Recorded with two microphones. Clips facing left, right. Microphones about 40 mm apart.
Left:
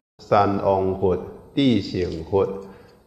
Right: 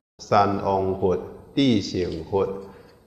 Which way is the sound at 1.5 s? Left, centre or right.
Centre.